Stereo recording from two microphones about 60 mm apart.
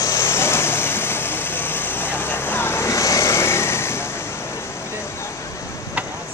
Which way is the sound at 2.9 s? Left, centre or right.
Left.